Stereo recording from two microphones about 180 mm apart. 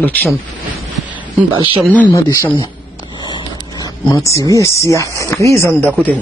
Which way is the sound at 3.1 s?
25° left (ahead or behind).